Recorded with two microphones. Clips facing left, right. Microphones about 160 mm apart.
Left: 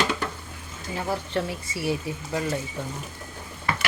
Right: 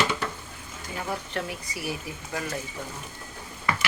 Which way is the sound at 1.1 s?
30° left (ahead or behind).